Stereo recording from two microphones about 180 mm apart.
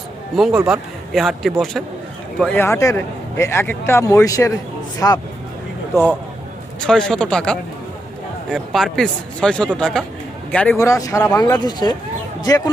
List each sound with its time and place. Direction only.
0.3 s a man's voice: centre (ahead or behind); by 5.2 s 20° left (ahead or behind)
6.7 s a man's voice: 5° left (ahead or behind)
10.8 s a man's voice: 20° left (ahead or behind)